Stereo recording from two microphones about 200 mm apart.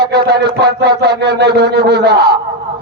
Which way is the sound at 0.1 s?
55° right (ahead or behind).